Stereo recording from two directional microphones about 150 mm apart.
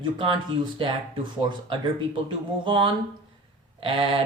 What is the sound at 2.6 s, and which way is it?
Speech, 35° right (ahead or behind).